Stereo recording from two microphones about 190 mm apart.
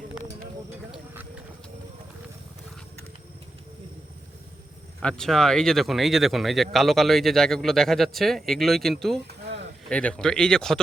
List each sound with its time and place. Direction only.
0.9 s a sound: 10° right (ahead or behind)
5.0 s speech: 5° left (ahead or behind)
9.2 s dishes: 65° right (ahead or behind)
9.9 s speech: 5° left (ahead or behind)